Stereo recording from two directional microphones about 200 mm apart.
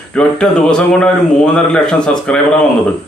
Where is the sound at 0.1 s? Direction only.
5° left (ahead or behind).